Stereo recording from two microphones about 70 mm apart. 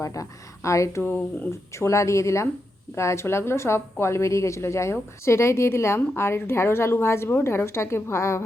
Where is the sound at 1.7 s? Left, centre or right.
Left.